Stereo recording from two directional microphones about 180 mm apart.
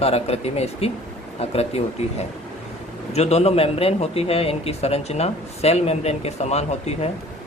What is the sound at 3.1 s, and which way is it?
Speech, 35° left (ahead or behind).